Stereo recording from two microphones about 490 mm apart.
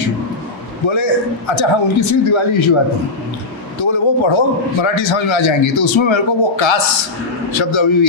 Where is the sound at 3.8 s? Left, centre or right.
Left.